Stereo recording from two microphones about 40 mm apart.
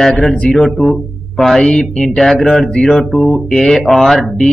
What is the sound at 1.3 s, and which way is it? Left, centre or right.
Speech, centre.